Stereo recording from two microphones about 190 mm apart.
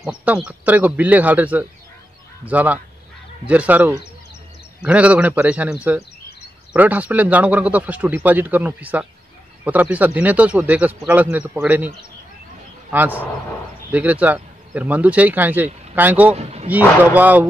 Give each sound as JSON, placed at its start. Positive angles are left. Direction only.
{"t": 0.0, "sound": "speech", "side_deg": -5}
{"t": 12.9, "sound": "speech", "side_deg": -10}
{"t": 16.3, "sound": "speech", "side_deg": -35}
{"t": 16.6, "sound": "speech", "side_deg": -10}